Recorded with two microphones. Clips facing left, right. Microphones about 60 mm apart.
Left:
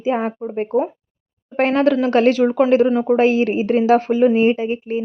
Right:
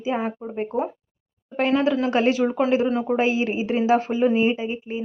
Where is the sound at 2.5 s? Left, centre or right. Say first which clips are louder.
Left 6 dB; left.